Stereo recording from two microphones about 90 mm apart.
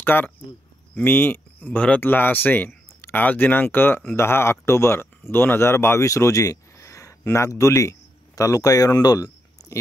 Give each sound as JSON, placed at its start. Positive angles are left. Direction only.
{"t": 0.0, "sound": "speech", "side_deg": 20}